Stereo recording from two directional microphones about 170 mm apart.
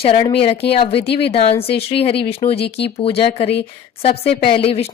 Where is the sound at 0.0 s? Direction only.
35° left (ahead or behind).